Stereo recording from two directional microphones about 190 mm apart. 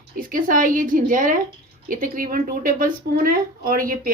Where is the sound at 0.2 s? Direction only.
45° right (ahead or behind).